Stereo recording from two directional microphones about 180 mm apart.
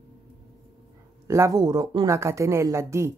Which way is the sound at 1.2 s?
15° right (ahead or behind).